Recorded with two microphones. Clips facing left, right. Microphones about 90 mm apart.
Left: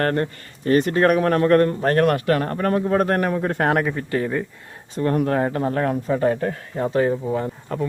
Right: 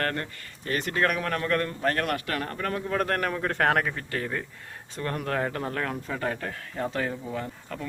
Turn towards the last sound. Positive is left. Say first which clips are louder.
# left 9 dB
turn(degrees=30)  # may be behind; listen again after turning